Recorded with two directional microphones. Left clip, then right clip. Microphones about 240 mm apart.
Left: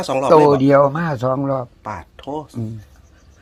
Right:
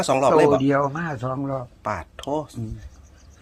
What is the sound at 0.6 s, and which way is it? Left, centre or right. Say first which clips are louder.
Speech: left 8 dB; left.